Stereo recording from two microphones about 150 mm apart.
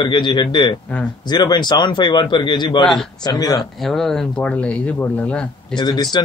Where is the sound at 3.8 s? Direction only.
Centre (ahead or behind).